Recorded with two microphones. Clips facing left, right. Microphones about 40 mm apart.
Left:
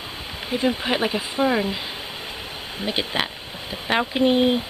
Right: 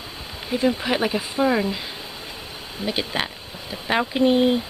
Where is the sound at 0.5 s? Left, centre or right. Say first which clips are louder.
Right 1 dB; centre.